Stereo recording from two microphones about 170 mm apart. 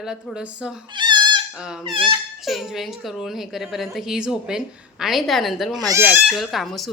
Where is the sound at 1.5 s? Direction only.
5° right (ahead or behind).